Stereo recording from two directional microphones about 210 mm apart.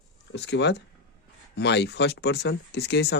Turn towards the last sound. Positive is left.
turn(degrees=55)  # may be behind; listen again after turning